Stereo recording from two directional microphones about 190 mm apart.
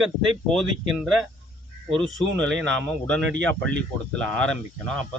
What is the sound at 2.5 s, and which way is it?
Speech, 80° right.